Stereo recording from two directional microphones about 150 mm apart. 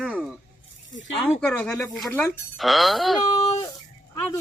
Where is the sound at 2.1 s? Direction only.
15° left (ahead or behind).